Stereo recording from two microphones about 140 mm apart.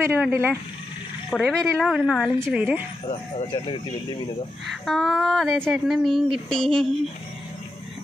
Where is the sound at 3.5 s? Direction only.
35° left (ahead or behind).